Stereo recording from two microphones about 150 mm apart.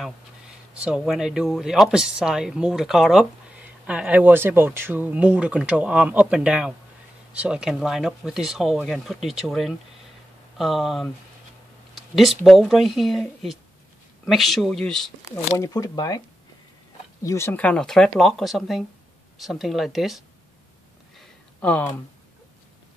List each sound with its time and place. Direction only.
0.8 s speech: 5° right (ahead or behind)
12.2 s speech: centre (ahead or behind)
15.5 s speech: 20° left (ahead or behind)
17.2 s speech: 20° left (ahead or behind); by 20.2 s centre (ahead or behind)
21.5 s speech: 10° left (ahead or behind)